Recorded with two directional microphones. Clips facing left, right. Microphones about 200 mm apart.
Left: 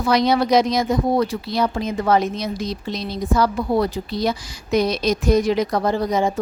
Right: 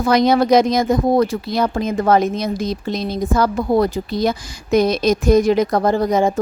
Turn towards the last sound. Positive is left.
turn(degrees=-50)  # may be behind; listen again after turning